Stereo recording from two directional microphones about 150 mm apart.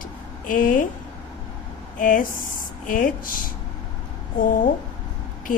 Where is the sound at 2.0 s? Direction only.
65° left (ahead or behind).